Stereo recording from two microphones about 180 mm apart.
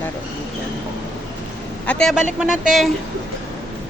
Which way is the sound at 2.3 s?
5° right (ahead or behind).